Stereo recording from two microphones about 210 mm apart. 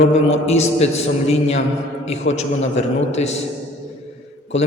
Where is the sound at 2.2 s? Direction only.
65° left (ahead or behind).